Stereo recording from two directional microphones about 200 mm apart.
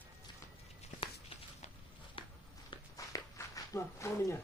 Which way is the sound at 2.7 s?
15° left (ahead or behind).